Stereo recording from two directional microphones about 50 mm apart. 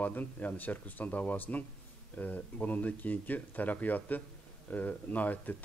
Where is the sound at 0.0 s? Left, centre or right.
Left.